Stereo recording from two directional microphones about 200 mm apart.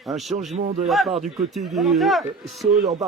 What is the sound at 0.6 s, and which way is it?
Speech, 35° right (ahead or behind).